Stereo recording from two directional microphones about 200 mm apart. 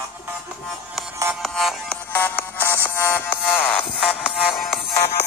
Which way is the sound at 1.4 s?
Centre (ahead or behind).